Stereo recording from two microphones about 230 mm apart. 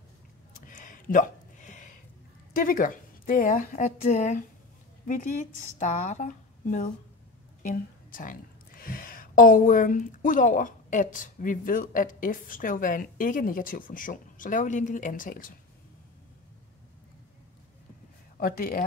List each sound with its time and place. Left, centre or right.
0.7 s a sound: left
2.5 s speech: left
18.4 s speech: left